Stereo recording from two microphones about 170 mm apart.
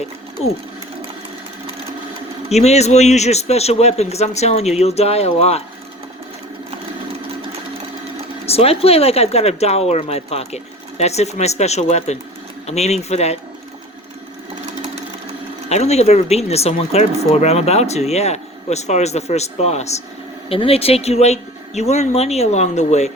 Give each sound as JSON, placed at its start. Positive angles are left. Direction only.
{"t": 2.5, "sound": "speech", "side_deg": 40}
{"t": 8.4, "sound": "speech", "side_deg": 35}
{"t": 15.7, "sound": "speech", "side_deg": 40}